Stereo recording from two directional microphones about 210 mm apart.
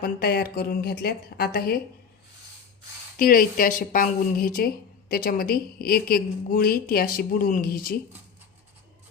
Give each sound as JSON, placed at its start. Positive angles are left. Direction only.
{"t": 0.0, "sound": "a woman's voice", "side_deg": 45}
{"t": 3.2, "sound": "a woman's voice", "side_deg": 45}